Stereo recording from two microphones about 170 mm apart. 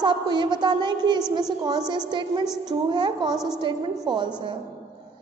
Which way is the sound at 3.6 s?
30° right (ahead or behind).